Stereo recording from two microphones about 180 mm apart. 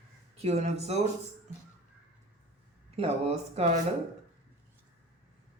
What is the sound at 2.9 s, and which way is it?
Speech, 35° right (ahead or behind).